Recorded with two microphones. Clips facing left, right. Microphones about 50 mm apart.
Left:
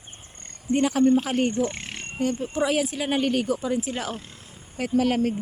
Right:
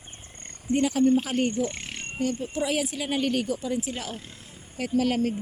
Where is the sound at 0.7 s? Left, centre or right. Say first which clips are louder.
Left 2 dB; left.